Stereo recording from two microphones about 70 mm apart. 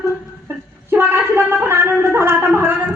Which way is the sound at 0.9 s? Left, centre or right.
Right.